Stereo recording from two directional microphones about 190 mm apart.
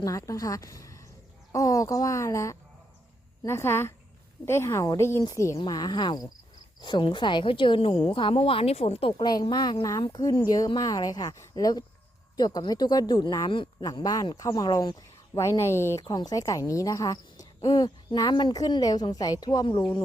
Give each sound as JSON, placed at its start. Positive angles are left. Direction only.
{"t": 0.0, "sound": "speech", "side_deg": 15}